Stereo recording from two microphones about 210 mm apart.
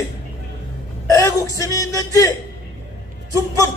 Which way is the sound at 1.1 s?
15° left (ahead or behind).